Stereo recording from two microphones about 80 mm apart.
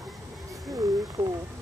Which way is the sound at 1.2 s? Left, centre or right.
Right.